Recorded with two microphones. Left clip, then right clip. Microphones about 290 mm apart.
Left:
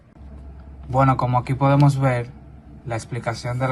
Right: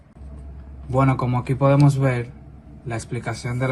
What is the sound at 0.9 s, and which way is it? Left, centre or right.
Speech, left.